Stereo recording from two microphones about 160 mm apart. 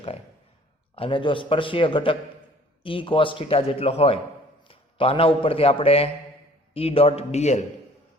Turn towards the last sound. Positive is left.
turn(degrees=45)  # may be behind; listen again after turning